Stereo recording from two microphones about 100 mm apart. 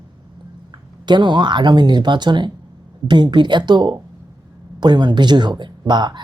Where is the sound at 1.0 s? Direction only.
50° right (ahead or behind).